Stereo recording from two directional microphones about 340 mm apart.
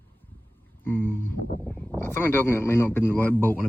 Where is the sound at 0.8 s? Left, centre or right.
Centre.